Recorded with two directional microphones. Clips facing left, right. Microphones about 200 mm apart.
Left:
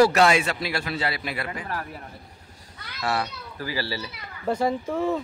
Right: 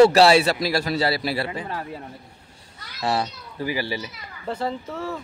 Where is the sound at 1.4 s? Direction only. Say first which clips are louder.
Right 2 dB; 25° right (ahead or behind).